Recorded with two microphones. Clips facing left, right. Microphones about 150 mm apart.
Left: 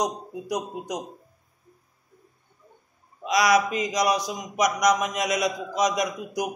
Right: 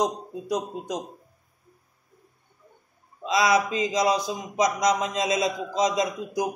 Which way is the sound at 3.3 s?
25° right (ahead or behind).